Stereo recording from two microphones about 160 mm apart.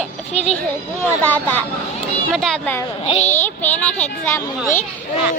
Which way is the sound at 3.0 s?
40° left (ahead or behind).